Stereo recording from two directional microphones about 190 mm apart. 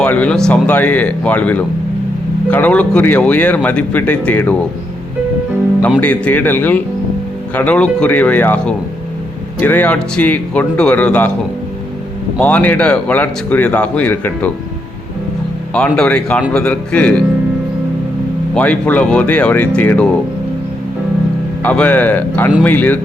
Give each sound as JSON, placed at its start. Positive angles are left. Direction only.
{"t": 0.0, "sound": "speech", "side_deg": 5}
{"t": 6.0, "sound": "speech", "side_deg": 10}
{"t": 12.4, "sound": "speech", "side_deg": 10}
{"t": 15.7, "sound": "speech", "side_deg": 5}
{"t": 18.5, "sound": "speech", "side_deg": 5}
{"t": 21.6, "sound": "speech", "side_deg": 10}